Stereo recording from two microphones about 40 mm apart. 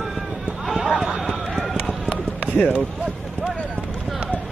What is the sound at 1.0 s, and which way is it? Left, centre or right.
Run, centre.